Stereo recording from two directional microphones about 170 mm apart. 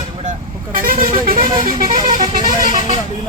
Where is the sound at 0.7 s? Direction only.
55° right (ahead or behind).